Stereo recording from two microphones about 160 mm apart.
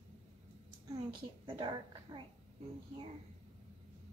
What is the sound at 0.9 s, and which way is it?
A child's voice, 25° right (ahead or behind).